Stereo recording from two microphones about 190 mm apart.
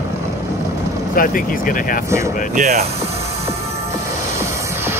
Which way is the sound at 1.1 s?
45° left (ahead or behind).